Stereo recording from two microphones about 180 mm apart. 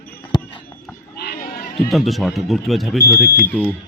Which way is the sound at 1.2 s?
60° left (ahead or behind).